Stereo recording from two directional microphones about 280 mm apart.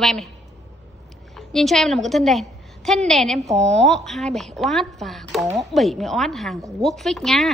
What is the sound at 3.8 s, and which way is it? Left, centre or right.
A woman's voice, centre.